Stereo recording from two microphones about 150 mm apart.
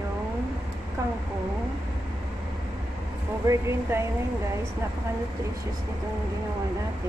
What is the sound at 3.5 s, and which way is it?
Speech, 20° right (ahead or behind).